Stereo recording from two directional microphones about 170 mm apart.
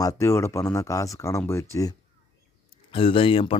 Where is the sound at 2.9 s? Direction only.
30° left (ahead or behind).